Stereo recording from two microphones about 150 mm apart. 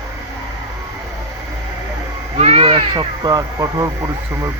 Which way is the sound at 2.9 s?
25° right (ahead or behind).